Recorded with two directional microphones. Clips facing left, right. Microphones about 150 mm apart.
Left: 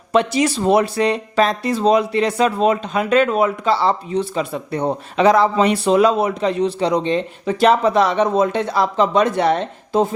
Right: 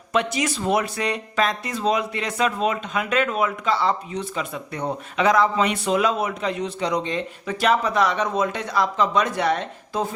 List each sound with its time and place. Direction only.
0.1 s speech: 30° left (ahead or behind)